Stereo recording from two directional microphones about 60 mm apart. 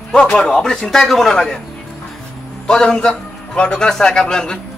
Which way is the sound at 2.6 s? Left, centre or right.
Centre.